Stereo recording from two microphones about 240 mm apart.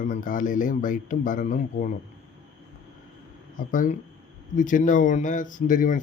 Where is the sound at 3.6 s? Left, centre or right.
Left.